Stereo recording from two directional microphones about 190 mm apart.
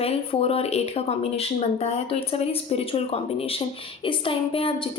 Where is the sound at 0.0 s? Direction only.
30° left (ahead or behind).